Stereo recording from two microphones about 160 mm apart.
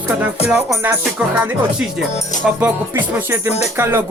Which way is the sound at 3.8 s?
15° right (ahead or behind).